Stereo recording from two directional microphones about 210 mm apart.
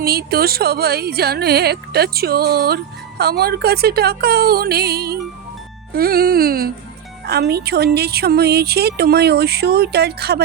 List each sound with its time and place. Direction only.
0.0 s speech: 50° right (ahead or behind)